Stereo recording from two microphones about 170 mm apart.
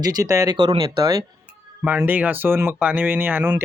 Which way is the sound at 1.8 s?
10° right (ahead or behind).